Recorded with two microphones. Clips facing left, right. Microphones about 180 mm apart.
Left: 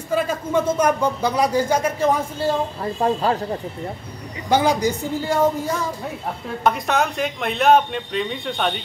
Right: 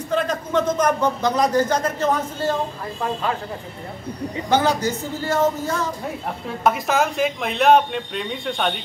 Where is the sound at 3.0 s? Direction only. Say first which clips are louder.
Left 6 dB; 35° left (ahead or behind).